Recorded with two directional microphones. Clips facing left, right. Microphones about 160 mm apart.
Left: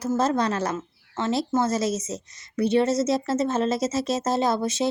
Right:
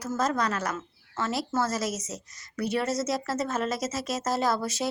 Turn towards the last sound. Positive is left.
turn(degrees=20)  # may be behind; listen again after turning